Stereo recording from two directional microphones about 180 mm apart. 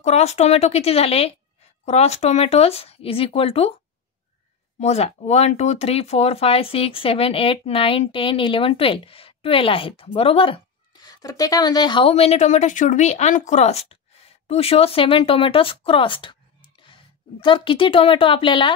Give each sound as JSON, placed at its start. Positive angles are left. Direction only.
{"t": 0.0, "sound": "speech", "side_deg": 40}
{"t": 4.7, "sound": "speech", "side_deg": 35}